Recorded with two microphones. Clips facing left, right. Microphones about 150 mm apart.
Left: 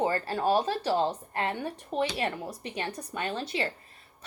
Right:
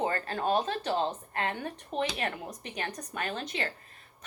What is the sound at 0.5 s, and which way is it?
Speech, 5° left (ahead or behind).